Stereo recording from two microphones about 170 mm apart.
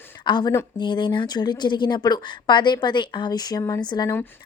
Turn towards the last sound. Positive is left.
turn(degrees=25)  # may be behind; listen again after turning